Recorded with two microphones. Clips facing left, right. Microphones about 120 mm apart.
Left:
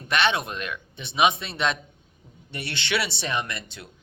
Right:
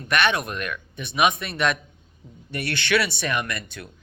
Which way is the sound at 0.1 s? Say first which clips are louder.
Right 1 dB; 25° left (ahead or behind).